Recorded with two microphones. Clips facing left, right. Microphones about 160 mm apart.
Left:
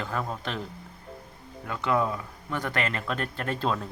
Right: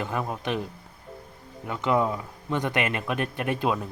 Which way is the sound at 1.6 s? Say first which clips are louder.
Right 2 dB; 20° right (ahead or behind).